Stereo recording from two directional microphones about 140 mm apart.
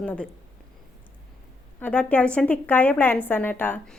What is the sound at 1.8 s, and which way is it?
Speech, 10° left (ahead or behind).